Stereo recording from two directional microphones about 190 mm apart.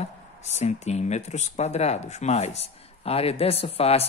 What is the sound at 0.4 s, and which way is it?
Speech, 35° left (ahead or behind).